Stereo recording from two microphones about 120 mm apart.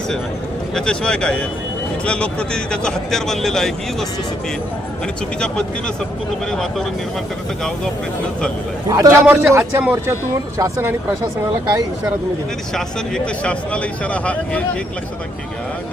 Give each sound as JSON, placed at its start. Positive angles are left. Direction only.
{"t": 0.7, "sound": "speech", "side_deg": 5}
{"t": 6.5, "sound": "speech", "side_deg": 5}
{"t": 8.9, "sound": "speech", "side_deg": -30}
{"t": 9.2, "sound": "speech", "side_deg": -10}
{"t": 12.7, "sound": "speech", "side_deg": 5}